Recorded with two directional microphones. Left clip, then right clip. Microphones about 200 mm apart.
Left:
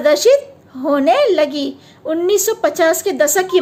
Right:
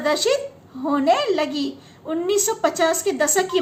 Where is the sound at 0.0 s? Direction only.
45° left (ahead or behind).